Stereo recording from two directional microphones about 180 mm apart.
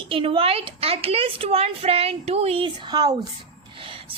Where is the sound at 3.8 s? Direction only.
30° right (ahead or behind).